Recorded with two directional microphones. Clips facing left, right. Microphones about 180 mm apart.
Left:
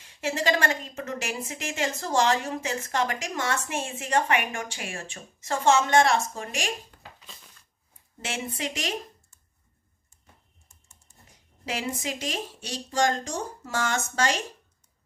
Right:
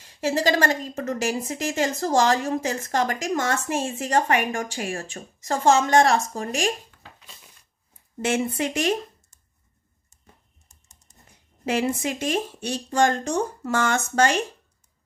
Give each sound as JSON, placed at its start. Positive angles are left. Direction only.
{"t": 0.0, "sound": "a woman's voice", "side_deg": -40}
{"t": 8.2, "sound": "a woman's voice", "side_deg": -50}
{"t": 11.6, "sound": "a woman's voice", "side_deg": -55}